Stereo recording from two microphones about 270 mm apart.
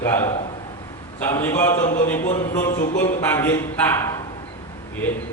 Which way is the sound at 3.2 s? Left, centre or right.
Centre.